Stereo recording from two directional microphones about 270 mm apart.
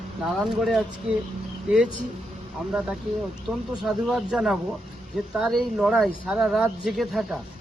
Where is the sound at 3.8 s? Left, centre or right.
Centre.